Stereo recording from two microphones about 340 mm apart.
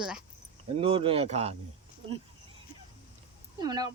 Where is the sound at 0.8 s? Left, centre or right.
Centre.